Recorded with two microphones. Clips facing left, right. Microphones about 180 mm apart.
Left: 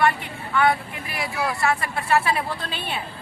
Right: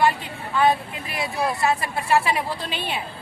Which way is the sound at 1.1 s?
20° right (ahead or behind).